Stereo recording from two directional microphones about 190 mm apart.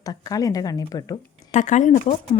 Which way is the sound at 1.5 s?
40° left (ahead or behind).